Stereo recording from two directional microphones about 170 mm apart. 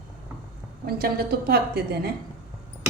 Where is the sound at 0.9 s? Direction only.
65° right (ahead or behind).